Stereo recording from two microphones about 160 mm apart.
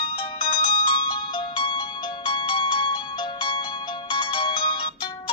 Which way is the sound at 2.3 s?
30° left (ahead or behind).